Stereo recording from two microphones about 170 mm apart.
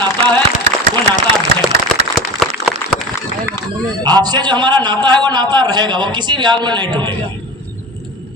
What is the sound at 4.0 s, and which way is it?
A man's voice, 25° right (ahead or behind).